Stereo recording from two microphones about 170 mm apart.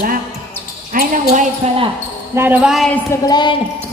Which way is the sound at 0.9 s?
55° right (ahead or behind).